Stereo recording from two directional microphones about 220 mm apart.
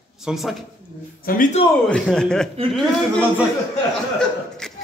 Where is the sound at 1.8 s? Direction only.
5° left (ahead or behind).